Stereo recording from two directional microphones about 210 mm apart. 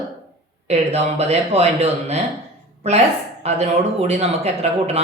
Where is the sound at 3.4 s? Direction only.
30° right (ahead or behind).